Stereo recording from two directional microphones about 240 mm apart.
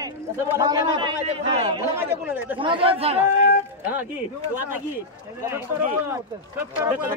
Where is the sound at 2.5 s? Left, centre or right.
Right.